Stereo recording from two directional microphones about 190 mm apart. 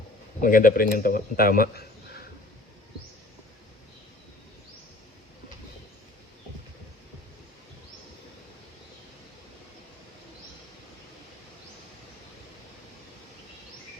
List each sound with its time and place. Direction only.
0.4 s a man's voice: 45° left (ahead or behind)